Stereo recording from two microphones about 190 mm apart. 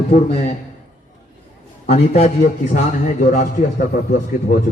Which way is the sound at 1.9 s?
35° left (ahead or behind).